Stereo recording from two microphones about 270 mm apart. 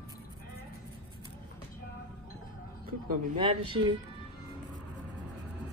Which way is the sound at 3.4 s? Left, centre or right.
Centre.